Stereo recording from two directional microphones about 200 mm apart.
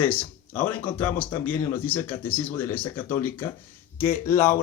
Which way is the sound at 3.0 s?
10° left (ahead or behind).